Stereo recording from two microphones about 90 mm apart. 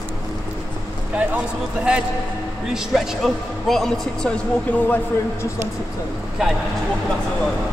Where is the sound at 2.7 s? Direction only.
5° right (ahead or behind).